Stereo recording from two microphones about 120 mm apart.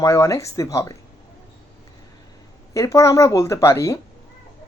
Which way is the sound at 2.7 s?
25° left (ahead or behind).